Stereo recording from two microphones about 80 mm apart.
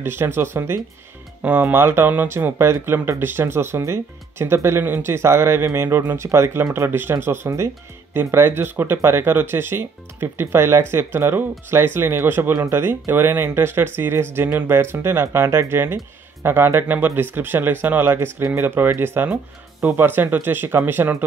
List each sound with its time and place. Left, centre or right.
0.0 s speech: right